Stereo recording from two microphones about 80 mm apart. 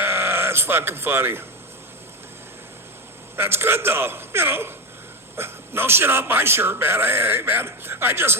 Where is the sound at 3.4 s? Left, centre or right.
Right.